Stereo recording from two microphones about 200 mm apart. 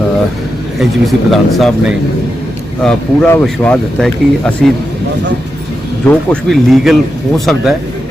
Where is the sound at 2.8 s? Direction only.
5° left (ahead or behind).